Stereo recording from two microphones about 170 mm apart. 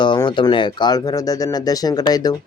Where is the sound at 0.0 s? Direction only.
30° left (ahead or behind).